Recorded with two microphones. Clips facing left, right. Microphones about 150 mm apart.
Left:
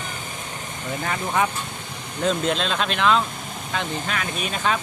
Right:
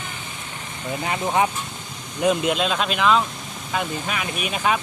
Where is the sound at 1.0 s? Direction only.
20° right (ahead or behind).